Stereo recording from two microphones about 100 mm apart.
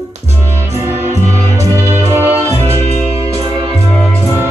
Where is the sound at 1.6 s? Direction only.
30° right (ahead or behind).